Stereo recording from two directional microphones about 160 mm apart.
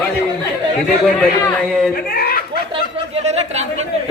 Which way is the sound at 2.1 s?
65° left (ahead or behind).